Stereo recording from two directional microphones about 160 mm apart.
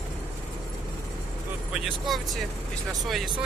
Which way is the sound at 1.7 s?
Centre (ahead or behind).